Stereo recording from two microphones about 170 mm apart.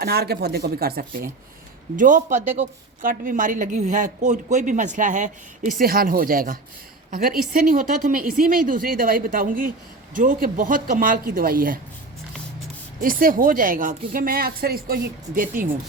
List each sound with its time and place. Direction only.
0.0 s speech: 65° right (ahead or behind)
2.0 s a woman's voice: 50° right (ahead or behind)
13.0 s a woman's voice: 55° right (ahead or behind)